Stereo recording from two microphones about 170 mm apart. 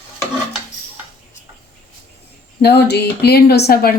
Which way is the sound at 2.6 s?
75° left (ahead or behind).